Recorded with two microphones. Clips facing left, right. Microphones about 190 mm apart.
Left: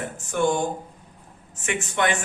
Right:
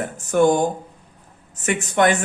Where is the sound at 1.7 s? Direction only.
40° right (ahead or behind).